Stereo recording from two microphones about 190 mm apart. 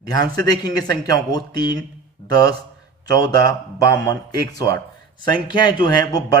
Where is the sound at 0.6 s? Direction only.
20° left (ahead or behind).